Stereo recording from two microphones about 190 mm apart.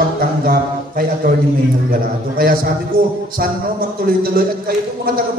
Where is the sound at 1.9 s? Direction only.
50° right (ahead or behind).